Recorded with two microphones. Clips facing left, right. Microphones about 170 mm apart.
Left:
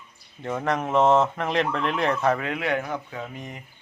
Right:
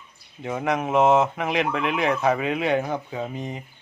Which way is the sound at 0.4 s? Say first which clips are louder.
Right 1 dB; 10° right (ahead or behind).